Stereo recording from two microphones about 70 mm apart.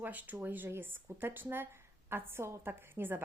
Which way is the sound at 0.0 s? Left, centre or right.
Right.